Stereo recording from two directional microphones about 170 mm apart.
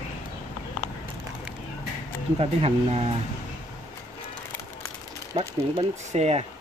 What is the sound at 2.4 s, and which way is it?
Speech, 35° right (ahead or behind).